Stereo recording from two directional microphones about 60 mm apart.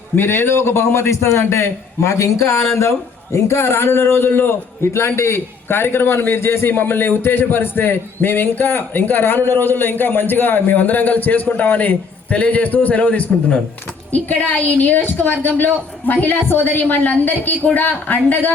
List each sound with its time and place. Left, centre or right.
0.2 s a man's voice: left